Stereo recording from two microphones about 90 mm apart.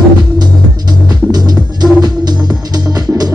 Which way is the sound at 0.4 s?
50° right (ahead or behind).